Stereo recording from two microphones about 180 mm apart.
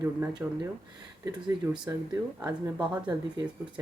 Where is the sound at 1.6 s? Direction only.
15° right (ahead or behind).